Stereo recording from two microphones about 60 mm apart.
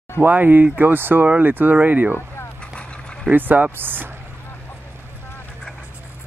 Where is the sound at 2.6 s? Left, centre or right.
Centre.